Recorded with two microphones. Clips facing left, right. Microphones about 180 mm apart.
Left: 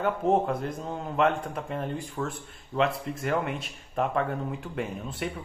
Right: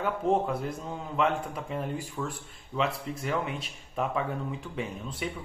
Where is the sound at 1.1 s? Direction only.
55° left (ahead or behind).